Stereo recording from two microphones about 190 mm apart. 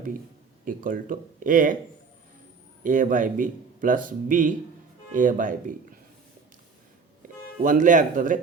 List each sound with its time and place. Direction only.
0.6 s speech: 45° right (ahead or behind)
2.8 s speech: 45° right (ahead or behind)
7.2 s speech: 45° right (ahead or behind)